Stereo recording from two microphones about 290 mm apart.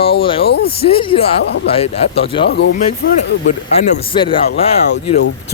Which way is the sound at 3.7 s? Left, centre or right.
Centre.